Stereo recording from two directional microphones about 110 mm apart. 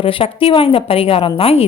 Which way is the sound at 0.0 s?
55° left (ahead or behind).